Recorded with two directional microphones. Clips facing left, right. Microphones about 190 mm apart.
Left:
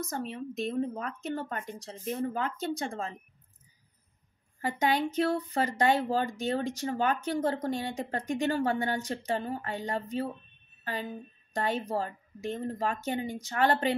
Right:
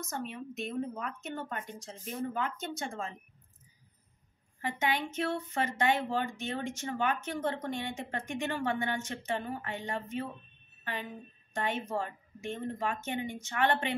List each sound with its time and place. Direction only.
0.0 s speech: 35° left (ahead or behind)
4.6 s speech: 40° left (ahead or behind)
10.8 s a sound: 40° left (ahead or behind)
11.5 s speech: 35° left (ahead or behind)